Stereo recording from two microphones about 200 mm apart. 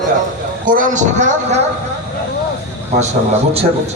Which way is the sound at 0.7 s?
40° right (ahead or behind).